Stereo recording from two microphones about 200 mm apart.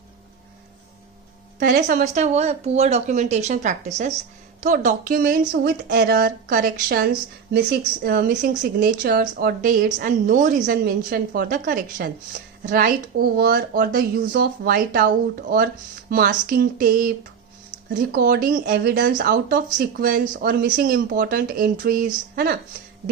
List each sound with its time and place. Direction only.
1.5 s a woman's voice: 45° right (ahead or behind)
18.1 s a woman's voice: 45° right (ahead or behind)